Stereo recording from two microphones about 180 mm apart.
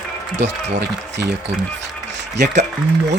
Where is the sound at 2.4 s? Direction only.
70° right (ahead or behind).